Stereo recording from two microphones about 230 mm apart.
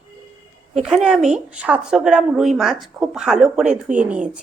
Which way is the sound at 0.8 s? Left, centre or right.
Centre.